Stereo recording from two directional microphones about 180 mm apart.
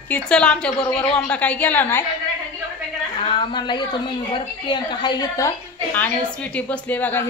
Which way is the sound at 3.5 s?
25° left (ahead or behind).